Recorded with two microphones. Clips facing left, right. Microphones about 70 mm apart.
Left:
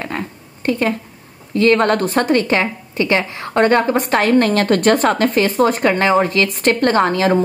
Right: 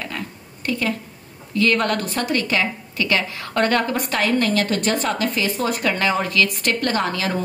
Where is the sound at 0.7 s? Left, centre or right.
Left.